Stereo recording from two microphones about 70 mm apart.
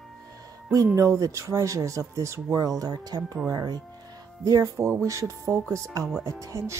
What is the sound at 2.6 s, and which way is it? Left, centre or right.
Speech, right.